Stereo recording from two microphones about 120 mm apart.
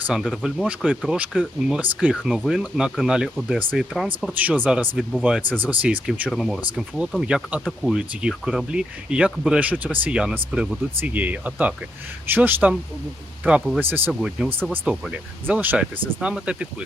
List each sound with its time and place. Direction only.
0.1 s speech: centre (ahead or behind)
4.4 s speech: 15° right (ahead or behind)
6.3 s speech: centre (ahead or behind)
14.1 s speech: 5° right (ahead or behind)